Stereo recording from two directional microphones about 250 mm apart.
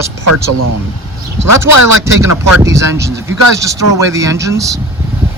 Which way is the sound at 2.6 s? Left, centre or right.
Centre.